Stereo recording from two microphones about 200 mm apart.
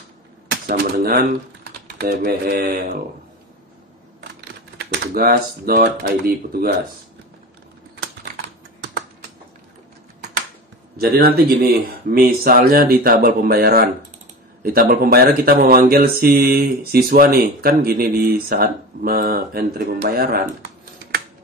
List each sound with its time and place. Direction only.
0.7 s speech: 45° right (ahead or behind)
4.9 s speech: 50° right (ahead or behind)
11.0 s speech: 50° right (ahead or behind)